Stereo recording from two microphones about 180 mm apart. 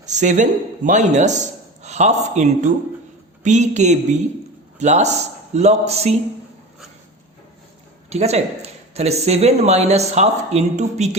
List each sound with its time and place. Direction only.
0.0 s a man's voice: 40° right (ahead or behind)
8.1 s speech: 35° right (ahead or behind)